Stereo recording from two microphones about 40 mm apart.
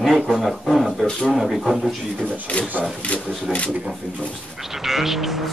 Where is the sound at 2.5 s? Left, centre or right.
Left.